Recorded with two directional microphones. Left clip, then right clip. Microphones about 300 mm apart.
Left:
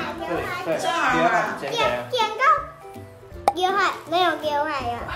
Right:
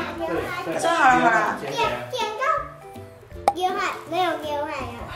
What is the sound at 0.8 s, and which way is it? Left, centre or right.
A child's voice, centre.